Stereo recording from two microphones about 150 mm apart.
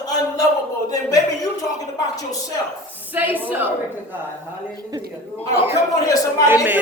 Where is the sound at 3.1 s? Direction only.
10° right (ahead or behind).